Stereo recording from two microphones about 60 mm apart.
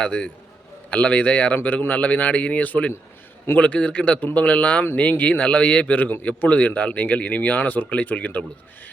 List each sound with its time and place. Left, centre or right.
0.0 s a man's voice: centre